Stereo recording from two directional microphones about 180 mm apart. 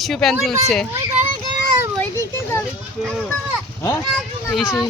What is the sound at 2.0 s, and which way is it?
Children playing, 15° left (ahead or behind).